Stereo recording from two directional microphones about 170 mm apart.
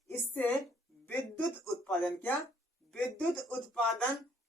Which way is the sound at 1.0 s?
10° left (ahead or behind).